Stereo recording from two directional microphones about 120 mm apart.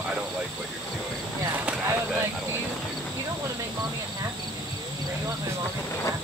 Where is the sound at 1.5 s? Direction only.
15° right (ahead or behind).